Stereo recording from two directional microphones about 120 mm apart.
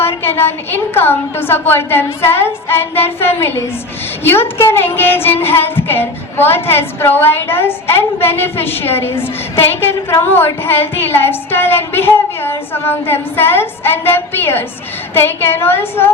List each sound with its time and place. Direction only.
0.0 s a woman's voice: 20° left (ahead or behind)